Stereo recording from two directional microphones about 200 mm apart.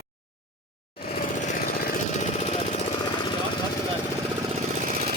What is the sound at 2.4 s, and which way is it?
Jackhammer, 35° left (ahead or behind).